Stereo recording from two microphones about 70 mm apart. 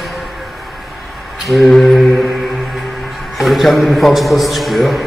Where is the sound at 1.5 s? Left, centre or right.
Centre.